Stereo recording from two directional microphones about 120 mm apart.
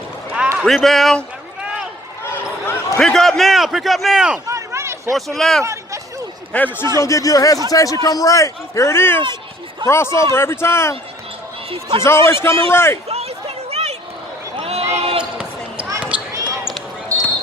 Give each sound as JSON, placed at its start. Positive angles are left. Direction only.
{"t": 0.6, "sound": "a man's voice", "side_deg": 0}
{"t": 2.3, "sound": "basketball bounce", "side_deg": 20}
{"t": 3.0, "sound": "a man's voice", "side_deg": 5}
{"t": 4.4, "sound": "run", "side_deg": -25}
{"t": 5.1, "sound": "a man's voice", "side_deg": 0}
{"t": 5.6, "sound": "a sound", "side_deg": -25}
{"t": 6.5, "sound": "a man's voice", "side_deg": 15}
{"t": 7.0, "sound": "a man's voice", "side_deg": 25}
{"t": 11.7, "sound": "a man's voice", "side_deg": -45}
{"t": 12.0, "sound": "a man's voice", "side_deg": 20}
{"t": 13.1, "sound": "a sound", "side_deg": -60}
{"t": 14.9, "sound": "basketball bounce", "side_deg": -55}
{"t": 16.0, "sound": "basketball bounce", "side_deg": -10}
{"t": 16.3, "sound": "basketball bounce", "side_deg": -30}